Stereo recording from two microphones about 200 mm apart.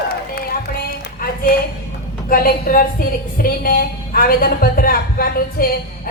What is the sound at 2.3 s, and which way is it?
A woman's voice, 45° left (ahead or behind).